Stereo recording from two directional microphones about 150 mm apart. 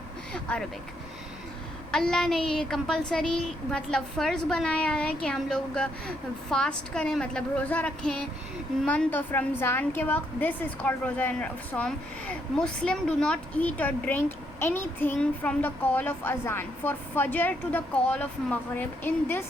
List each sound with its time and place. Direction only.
0.3 s vehicle: 10° left (ahead or behind)
1.9 s a woman's voice: 5° left (ahead or behind)